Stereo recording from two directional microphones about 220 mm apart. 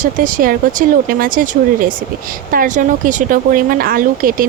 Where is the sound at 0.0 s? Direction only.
40° right (ahead or behind).